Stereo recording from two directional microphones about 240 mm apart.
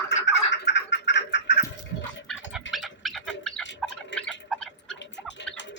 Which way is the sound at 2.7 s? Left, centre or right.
Centre.